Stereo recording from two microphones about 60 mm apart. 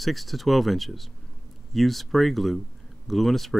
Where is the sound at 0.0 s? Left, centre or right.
Centre.